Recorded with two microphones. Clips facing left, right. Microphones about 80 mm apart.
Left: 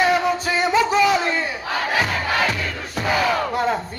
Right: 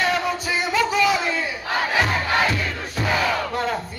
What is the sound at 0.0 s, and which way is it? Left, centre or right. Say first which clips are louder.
Music: left 4 dB; centre.